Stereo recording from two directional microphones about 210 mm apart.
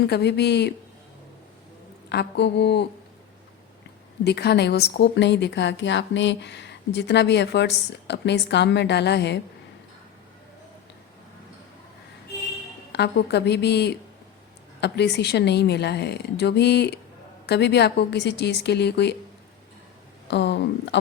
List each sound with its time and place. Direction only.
0.0 s speech: 50° left (ahead or behind)
2.0 s speech: 50° left (ahead or behind)
4.2 s speech: 50° left (ahead or behind)
12.9 s speech: 50° left (ahead or behind)
20.2 s speech: 55° left (ahead or behind)